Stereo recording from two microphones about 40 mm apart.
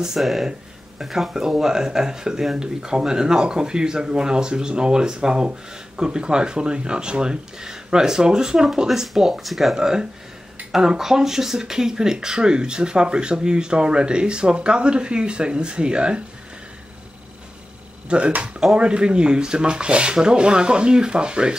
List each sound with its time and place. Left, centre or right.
0.2 s speech: centre
8.8 s speech: centre
9.8 s speech: centre
18.0 s speech: right